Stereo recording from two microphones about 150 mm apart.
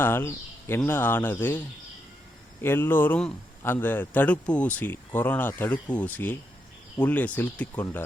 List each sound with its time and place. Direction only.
0.0 s speech: 15° left (ahead or behind)